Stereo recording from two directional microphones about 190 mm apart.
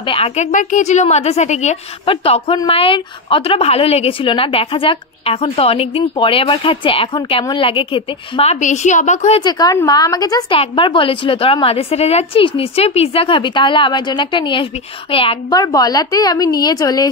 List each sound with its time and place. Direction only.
0.0 s a woman's voice: 30° left (ahead or behind)
9.4 s a woman's voice: 20° left (ahead or behind)